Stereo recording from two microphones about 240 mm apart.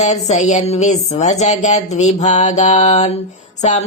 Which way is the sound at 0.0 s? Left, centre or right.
Left.